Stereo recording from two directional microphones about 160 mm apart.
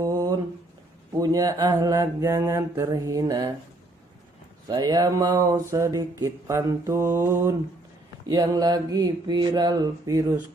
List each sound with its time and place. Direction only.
1.1 s mantra: 20° right (ahead or behind)
4.6 s mantra: 25° right (ahead or behind)